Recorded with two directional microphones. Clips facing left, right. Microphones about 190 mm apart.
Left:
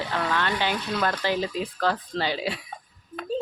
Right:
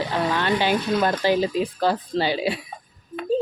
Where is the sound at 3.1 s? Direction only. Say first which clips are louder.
Right 7 dB; 5° right (ahead or behind).